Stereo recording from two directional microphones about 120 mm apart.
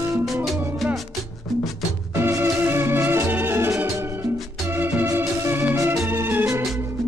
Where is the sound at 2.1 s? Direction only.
20° right (ahead or behind).